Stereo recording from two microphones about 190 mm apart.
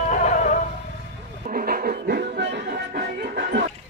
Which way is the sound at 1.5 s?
45° right (ahead or behind).